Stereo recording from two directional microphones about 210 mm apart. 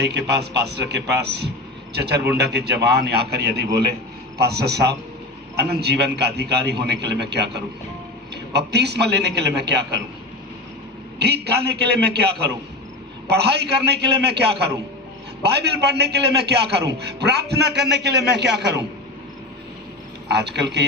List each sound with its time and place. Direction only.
0.0 s a man's voice: 55° right (ahead or behind)
11.2 s a man's voice: 50° right (ahead or behind)
20.3 s a man's voice: 55° right (ahead or behind)